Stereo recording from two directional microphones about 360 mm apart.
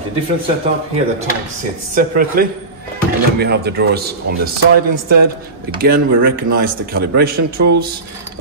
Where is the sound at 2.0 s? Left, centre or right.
Right.